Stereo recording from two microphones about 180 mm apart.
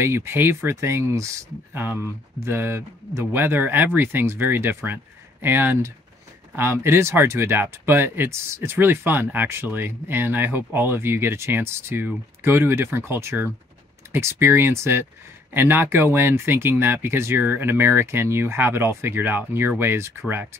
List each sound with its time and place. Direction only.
0.0 s speech: 15° right (ahead or behind)